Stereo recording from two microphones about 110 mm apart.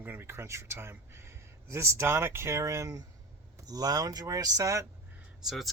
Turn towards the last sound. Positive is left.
turn(degrees=-5)  # may be behind; listen again after turning